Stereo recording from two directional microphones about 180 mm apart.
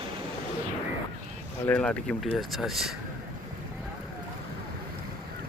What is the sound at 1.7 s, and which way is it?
Speech, 5° left (ahead or behind).